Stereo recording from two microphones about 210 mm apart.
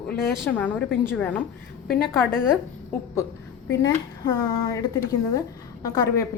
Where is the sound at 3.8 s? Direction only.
20° left (ahead or behind).